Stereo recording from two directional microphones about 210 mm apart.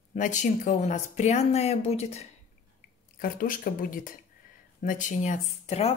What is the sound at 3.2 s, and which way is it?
Speech, 40° left (ahead or behind).